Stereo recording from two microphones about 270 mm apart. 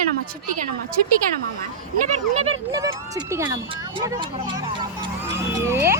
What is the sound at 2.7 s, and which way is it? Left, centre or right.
A child's voice, centre.